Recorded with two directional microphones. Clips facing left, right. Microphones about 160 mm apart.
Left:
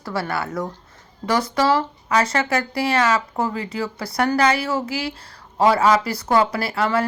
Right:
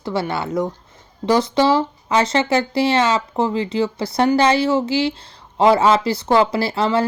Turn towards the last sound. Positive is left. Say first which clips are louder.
# right 3 dB
turn(degrees=-25)  # may be behind; listen again after turning